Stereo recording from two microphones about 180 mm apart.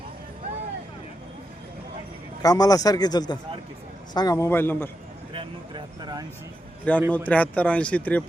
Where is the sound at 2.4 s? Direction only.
20° left (ahead or behind).